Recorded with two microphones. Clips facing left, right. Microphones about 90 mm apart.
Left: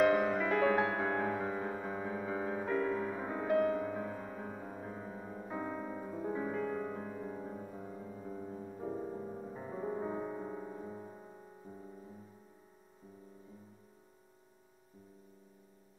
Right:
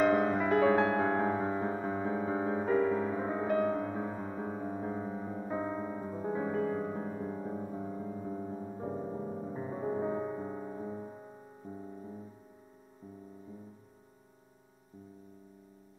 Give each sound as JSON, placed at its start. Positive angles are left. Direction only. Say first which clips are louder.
{"t": 0.1, "sound": "music", "louder": "right 3 dB", "side_deg": -30}
{"t": 3.4, "sound": "music", "louder": "even", "side_deg": 0}
{"t": 3.9, "sound": "music", "louder": "right 3 dB", "side_deg": -20}
{"t": 6.3, "sound": "music", "louder": "right 5 dB", "side_deg": -25}